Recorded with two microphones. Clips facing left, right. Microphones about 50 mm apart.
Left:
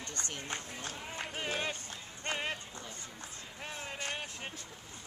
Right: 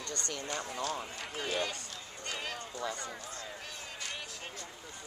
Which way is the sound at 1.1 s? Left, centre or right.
Left.